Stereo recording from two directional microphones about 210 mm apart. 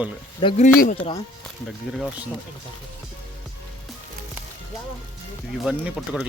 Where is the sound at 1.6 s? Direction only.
Centre (ahead or behind).